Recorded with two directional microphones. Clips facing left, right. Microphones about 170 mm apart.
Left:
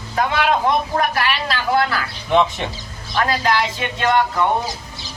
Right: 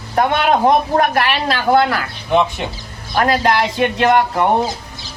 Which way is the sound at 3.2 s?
50° right (ahead or behind).